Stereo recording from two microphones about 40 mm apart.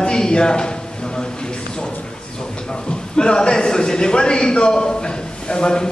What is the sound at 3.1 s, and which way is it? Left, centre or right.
A man's voice, left.